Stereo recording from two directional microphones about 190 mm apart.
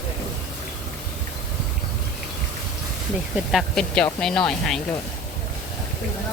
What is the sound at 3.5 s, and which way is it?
Speech, centre (ahead or behind).